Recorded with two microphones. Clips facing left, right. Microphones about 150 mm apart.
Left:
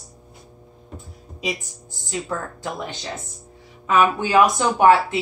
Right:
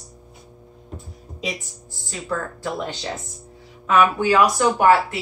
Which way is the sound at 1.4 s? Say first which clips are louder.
Left 2 dB; 20° left (ahead or behind).